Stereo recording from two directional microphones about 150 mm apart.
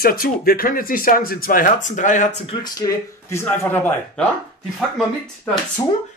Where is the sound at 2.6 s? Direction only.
20° left (ahead or behind).